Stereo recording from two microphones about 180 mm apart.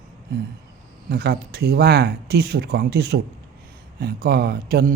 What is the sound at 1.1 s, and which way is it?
Speech, 60° right (ahead or behind).